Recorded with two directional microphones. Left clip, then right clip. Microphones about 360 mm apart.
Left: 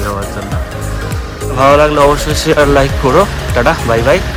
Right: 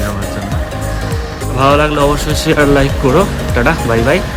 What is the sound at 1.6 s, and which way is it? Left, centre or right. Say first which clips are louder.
Speech: left 3 dB; centre.